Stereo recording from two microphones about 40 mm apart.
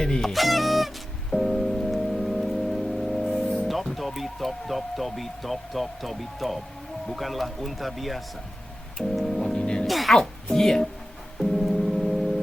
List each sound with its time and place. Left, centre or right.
0.2 s music: centre
3.7 s speech: centre
9.0 s organ: centre
9.4 s music: left
9.8 s music: centre
10.5 s speech: centre
11.5 s gong: centre